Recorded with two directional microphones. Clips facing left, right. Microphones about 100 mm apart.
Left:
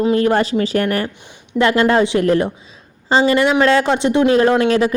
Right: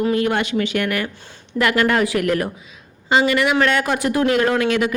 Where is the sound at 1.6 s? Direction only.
25° left (ahead or behind).